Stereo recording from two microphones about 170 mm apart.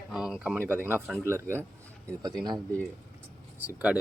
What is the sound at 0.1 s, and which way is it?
Speech, 5° right (ahead or behind).